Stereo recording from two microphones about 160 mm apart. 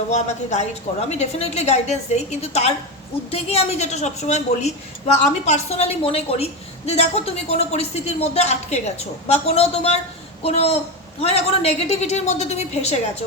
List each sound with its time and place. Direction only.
0.1 s a woman's voice: 45° left (ahead or behind)